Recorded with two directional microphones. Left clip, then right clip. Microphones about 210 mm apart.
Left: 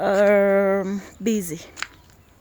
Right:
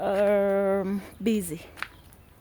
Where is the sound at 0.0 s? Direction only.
25° left (ahead or behind).